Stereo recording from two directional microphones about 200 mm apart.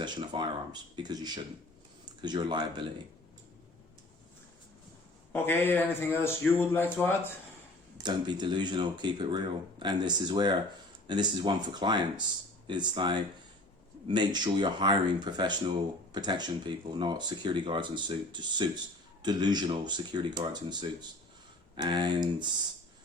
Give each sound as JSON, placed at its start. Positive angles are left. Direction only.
{"t": 0.0, "sound": "speech", "side_deg": -20}
{"t": 5.3, "sound": "speech", "side_deg": 10}
{"t": 7.9, "sound": "speech", "side_deg": -20}